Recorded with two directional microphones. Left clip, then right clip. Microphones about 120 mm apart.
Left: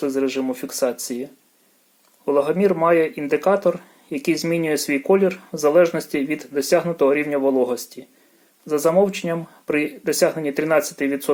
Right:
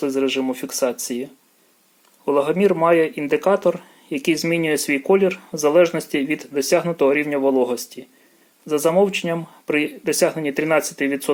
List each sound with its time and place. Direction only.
0.0 s speech: 15° right (ahead or behind)